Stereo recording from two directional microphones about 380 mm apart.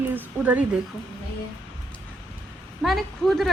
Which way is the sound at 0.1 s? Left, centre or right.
Centre.